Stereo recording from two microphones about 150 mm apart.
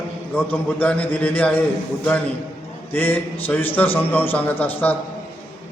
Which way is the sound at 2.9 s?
10° left (ahead or behind).